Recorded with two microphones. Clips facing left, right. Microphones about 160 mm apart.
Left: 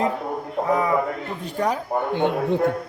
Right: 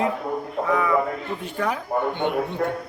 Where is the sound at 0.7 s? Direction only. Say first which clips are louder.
Left 1 dB; 30° left (ahead or behind).